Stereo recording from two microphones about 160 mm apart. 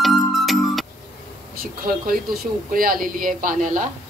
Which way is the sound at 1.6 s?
65° right (ahead or behind).